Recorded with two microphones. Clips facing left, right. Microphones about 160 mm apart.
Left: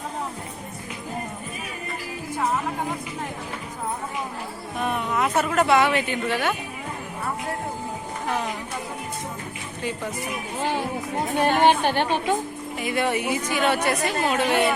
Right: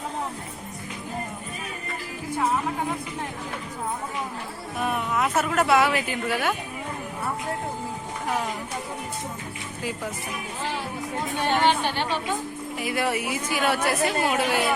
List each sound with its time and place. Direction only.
4.8 s speech: 5° right (ahead or behind)
11.3 s a woman's voice: 45° left (ahead or behind)
12.8 s speech: centre (ahead or behind)